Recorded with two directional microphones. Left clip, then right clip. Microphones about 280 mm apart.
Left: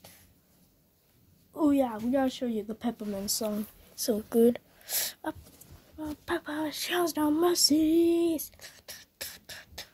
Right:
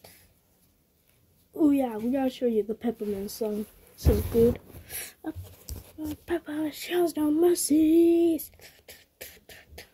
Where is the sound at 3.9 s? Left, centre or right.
Centre.